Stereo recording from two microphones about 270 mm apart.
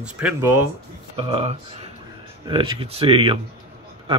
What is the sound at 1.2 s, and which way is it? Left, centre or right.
Speech, right.